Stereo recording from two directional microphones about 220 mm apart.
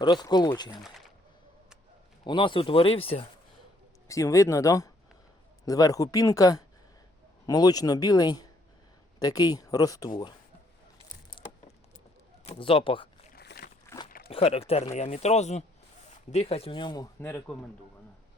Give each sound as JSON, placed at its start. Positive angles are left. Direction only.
{"t": 0.0, "sound": "speech", "side_deg": 20}
{"t": 0.8, "sound": "speech", "side_deg": 0}
{"t": 2.2, "sound": "speech", "side_deg": 20}
{"t": 4.1, "sound": "speech", "side_deg": 15}
{"t": 12.5, "sound": "speech", "side_deg": 25}
{"t": 13.3, "sound": "a sound", "side_deg": 45}
{"t": 13.8, "sound": "a sound", "side_deg": 15}
{"t": 14.3, "sound": "speech", "side_deg": 25}